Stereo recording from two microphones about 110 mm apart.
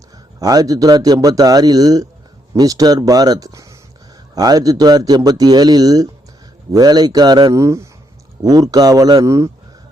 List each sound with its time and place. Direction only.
0.3 s speech: 35° right (ahead or behind)
7.5 s speech: 25° right (ahead or behind)